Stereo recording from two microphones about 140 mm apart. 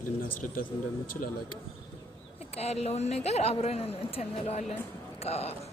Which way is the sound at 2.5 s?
50° left (ahead or behind).